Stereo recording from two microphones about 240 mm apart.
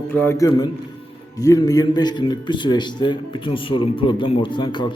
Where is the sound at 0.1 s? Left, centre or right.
Centre.